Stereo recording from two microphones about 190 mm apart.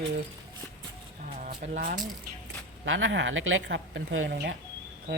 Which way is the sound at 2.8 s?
85° right.